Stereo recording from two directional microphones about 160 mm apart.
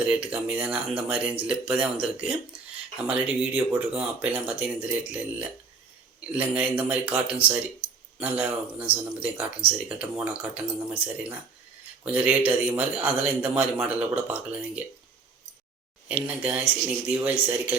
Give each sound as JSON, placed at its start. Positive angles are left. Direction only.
{"t": 0.0, "sound": "speech", "side_deg": -10}
{"t": 2.0, "sound": "speech", "side_deg": -35}
{"t": 3.1, "sound": "speech", "side_deg": -5}
{"t": 16.0, "sound": "speech", "side_deg": -10}